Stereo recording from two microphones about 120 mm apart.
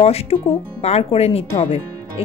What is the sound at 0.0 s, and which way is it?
Speech, 60° left (ahead or behind).